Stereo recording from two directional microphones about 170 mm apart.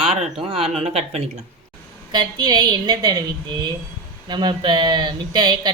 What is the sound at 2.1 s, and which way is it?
Speech, 25° right (ahead or behind).